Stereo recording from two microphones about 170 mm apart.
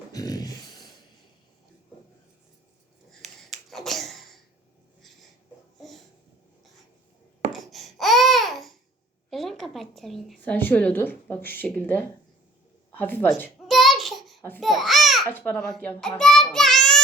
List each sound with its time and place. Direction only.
0.1 s a sound: 20° left (ahead or behind)
3.7 s finger snapping: centre (ahead or behind)
7.5 s babbling: centre (ahead or behind)
9.3 s a woman's voice: centre (ahead or behind)
13.7 s a sound: centre (ahead or behind)
14.6 s babbling: centre (ahead or behind)
15.3 s a child's voice: 10° left (ahead or behind)